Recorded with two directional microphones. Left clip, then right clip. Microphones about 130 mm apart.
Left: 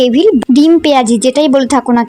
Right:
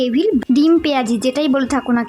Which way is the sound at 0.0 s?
35° left (ahead or behind).